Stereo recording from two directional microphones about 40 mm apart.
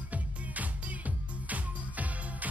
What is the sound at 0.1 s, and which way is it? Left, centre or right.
Music, right.